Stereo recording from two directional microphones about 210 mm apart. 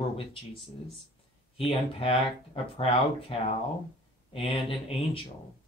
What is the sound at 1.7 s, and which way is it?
Speech, 25° left (ahead or behind).